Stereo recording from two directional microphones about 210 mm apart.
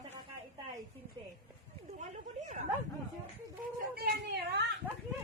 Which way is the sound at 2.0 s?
35° right (ahead or behind).